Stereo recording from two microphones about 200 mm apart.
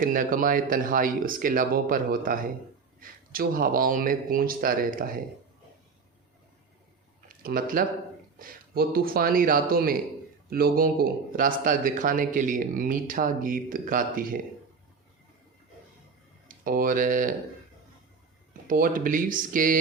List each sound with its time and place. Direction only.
0.0 s speech: 45° right (ahead or behind)
7.4 s speech: 45° right (ahead or behind)
16.5 s speech: 45° right (ahead or behind)
18.5 s speech: 45° right (ahead or behind)